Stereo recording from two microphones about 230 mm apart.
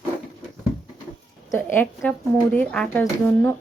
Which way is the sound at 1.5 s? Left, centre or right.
Centre.